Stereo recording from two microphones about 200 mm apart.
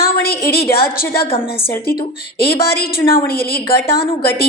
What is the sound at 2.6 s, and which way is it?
Speech, 50° left (ahead or behind).